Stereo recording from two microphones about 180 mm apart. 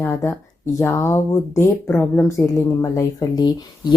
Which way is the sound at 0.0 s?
15° left (ahead or behind).